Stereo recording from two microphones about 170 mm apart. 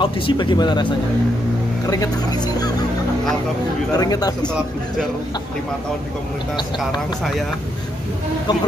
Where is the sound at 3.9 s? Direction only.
20° left (ahead or behind).